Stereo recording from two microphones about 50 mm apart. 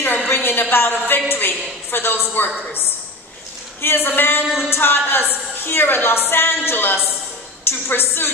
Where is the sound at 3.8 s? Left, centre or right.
Left.